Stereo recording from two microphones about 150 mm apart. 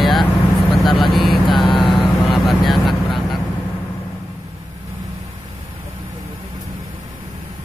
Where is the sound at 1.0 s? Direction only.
Centre (ahead or behind).